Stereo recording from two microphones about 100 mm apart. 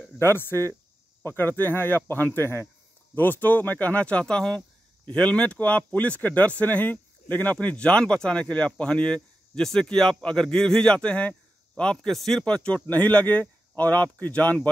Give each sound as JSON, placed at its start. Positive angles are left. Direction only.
{"t": 0.2, "sound": "speech", "side_deg": 25}